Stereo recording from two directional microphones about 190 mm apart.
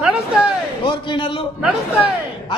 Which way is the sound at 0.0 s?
5° right (ahead or behind).